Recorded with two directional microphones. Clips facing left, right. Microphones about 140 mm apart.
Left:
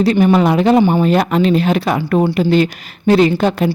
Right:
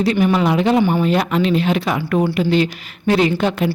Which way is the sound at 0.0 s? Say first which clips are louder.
Left 4 dB; 35° left (ahead or behind).